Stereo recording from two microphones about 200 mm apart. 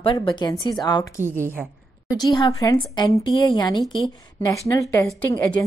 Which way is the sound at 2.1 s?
20° left (ahead or behind).